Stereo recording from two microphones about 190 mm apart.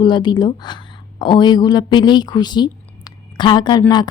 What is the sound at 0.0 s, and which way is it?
A woman's voice, 25° left (ahead or behind).